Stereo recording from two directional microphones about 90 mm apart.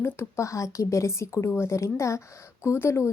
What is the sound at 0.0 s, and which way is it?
Speech, 30° left (ahead or behind).